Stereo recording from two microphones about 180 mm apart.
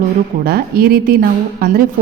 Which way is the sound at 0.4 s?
60° right (ahead or behind).